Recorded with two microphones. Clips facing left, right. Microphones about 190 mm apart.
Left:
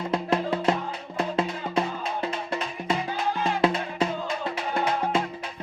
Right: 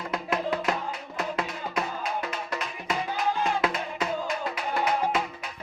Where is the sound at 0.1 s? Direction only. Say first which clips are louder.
Left 3 dB; 30° left (ahead or behind).